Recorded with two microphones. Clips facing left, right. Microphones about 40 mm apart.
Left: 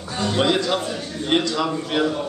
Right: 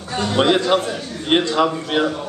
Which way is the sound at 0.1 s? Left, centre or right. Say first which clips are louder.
Right 3 dB; right.